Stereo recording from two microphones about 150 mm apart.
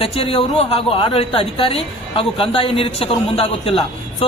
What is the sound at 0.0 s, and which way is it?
A woman's voice, 40° left (ahead or behind).